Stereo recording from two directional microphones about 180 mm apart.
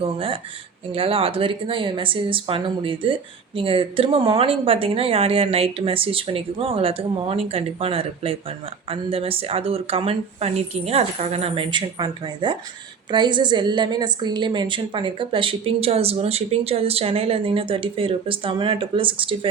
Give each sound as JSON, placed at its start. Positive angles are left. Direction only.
{"t": 0.0, "sound": "a woman's voice", "side_deg": -30}